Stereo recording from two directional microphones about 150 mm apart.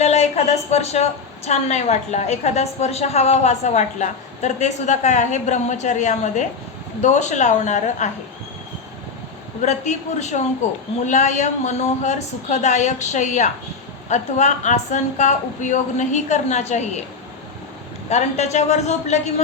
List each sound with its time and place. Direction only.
0.0 s a woman's voice: 45° left (ahead or behind)
9.6 s a woman's voice: 50° left (ahead or behind)
18.1 s a woman's voice: 50° left (ahead or behind)